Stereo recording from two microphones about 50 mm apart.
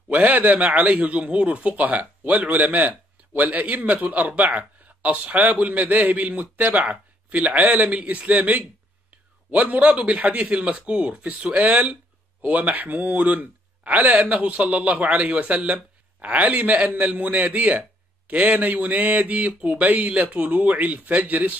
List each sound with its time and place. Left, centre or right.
0.1 s speech: right